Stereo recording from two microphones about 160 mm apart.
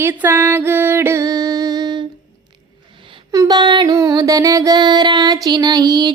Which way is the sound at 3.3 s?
25° right (ahead or behind).